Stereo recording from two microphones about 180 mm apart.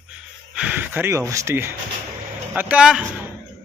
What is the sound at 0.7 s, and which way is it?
Speech, 10° right (ahead or behind).